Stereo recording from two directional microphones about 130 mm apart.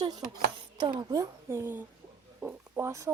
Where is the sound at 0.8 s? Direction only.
35° right (ahead or behind).